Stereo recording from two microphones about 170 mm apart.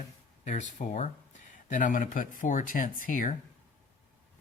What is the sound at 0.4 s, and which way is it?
Speech, 45° left (ahead or behind).